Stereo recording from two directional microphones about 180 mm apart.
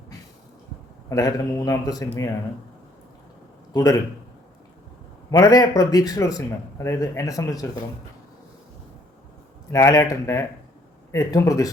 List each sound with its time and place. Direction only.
1.1 s a man's voice: 20° left (ahead or behind)
3.7 s a man's voice: 20° left (ahead or behind)
5.3 s a man's voice: 20° left (ahead or behind)
9.7 s a man's voice: 20° left (ahead or behind)